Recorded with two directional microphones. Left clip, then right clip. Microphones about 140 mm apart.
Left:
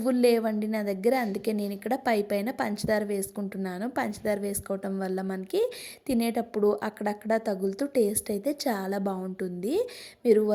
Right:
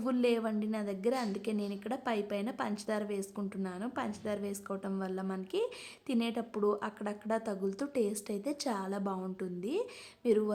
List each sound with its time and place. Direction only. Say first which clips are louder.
0.0 s speech: left 8 dB; 30° left (ahead or behind)